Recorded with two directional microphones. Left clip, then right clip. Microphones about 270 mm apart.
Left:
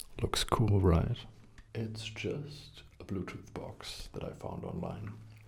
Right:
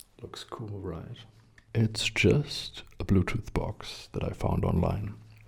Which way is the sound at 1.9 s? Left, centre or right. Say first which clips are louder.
Right 15 dB; right.